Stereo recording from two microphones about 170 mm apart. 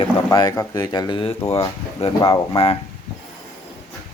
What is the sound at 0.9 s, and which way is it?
Speech, 25° left (ahead or behind).